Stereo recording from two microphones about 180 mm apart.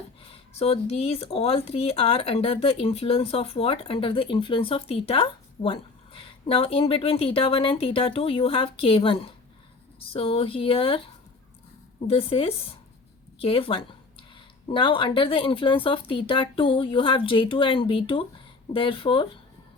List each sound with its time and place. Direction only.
0.3 s speech: 35° left (ahead or behind)